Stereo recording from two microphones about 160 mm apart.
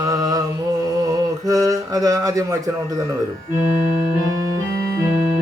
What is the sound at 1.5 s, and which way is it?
Speech, 20° right (ahead or behind).